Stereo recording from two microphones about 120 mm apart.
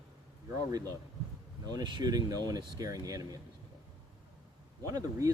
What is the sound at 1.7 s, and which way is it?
Speech, 35° right (ahead or behind).